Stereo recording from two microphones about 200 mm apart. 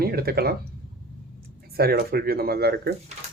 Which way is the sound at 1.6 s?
50° right (ahead or behind).